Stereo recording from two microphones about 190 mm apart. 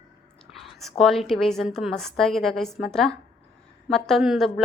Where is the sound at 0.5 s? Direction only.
Centre (ahead or behind).